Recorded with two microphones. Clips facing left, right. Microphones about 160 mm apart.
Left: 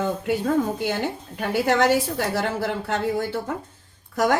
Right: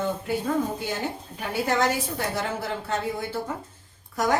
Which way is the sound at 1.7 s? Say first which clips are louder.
Left 5 dB; 70° left (ahead or behind).